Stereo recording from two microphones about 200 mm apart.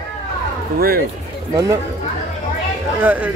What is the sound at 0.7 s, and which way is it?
Speech, 50° right (ahead or behind).